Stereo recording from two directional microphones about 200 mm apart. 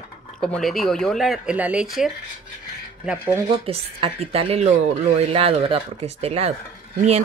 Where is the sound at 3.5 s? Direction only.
30° right (ahead or behind).